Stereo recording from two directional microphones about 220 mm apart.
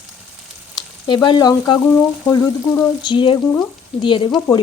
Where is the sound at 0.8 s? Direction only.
20° left (ahead or behind).